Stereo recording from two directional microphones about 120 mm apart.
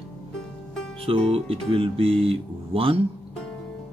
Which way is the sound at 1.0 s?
55° right (ahead or behind).